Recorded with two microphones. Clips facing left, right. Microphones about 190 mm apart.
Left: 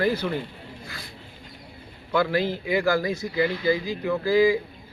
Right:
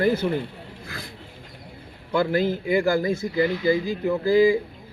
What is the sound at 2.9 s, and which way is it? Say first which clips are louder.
A man's voice: right 2 dB; 25° right (ahead or behind).